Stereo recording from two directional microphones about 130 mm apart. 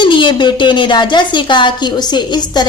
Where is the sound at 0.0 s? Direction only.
40° left (ahead or behind).